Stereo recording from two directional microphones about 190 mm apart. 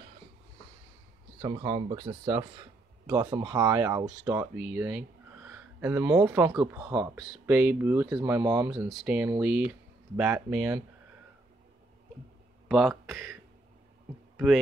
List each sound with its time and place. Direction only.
1.4 s speech: 25° right (ahead or behind); by 10.8 s 10° right (ahead or behind)
12.6 s speech: centre (ahead or behind)
14.3 s heart sounds: centre (ahead or behind)